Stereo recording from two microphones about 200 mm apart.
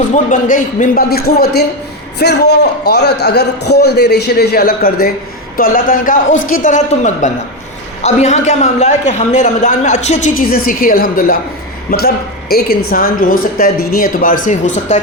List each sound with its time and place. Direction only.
0.1 s a man's voice: 40° left (ahead or behind)